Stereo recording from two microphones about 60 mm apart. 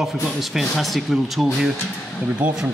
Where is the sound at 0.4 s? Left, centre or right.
Centre.